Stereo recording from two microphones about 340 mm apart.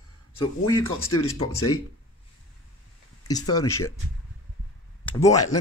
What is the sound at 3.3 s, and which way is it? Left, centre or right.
Speech, centre.